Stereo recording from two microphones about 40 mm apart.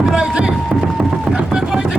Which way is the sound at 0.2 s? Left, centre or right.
Right.